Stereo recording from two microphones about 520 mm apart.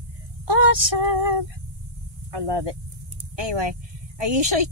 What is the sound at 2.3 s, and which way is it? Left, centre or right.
A woman's voice, right.